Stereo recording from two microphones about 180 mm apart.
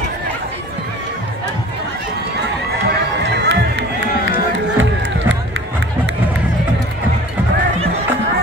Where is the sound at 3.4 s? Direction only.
80° right.